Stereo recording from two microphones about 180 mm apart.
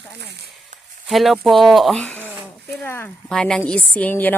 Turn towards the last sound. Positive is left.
turn(degrees=10)  # may be behind; listen again after turning